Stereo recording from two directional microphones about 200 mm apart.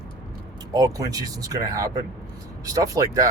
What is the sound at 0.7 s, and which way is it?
Speech, 20° right (ahead or behind).